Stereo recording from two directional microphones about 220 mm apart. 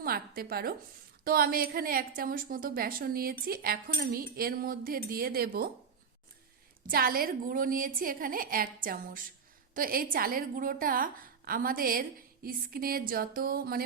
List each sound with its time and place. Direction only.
0.0 s a woman's voice: 45° right (ahead or behind)
6.8 s a woman's voice: 40° right (ahead or behind)